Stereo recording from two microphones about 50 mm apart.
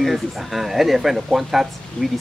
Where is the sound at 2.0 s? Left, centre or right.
Left.